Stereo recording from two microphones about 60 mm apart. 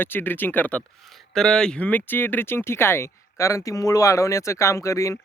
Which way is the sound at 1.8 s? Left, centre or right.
Left.